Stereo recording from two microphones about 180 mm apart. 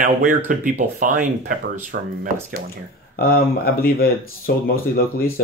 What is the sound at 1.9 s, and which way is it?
Speech, 60° right (ahead or behind).